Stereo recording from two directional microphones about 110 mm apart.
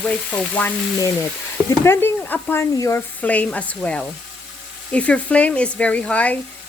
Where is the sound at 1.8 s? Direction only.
20° left (ahead or behind).